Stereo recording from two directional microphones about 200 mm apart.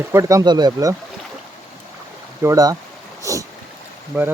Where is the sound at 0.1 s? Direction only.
15° right (ahead or behind).